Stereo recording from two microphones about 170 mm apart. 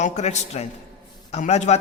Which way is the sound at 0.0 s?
40° left (ahead or behind).